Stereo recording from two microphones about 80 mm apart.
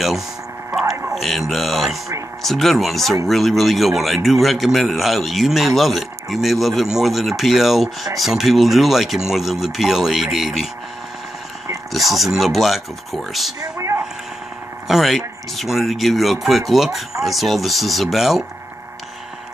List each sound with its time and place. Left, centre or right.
1.1 s speech: centre
11.9 s speech: centre
13.6 s speech: right
14.9 s speech: centre